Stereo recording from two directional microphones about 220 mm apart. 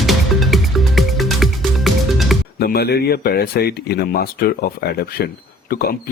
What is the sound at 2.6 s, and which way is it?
Speech, 45° left (ahead or behind).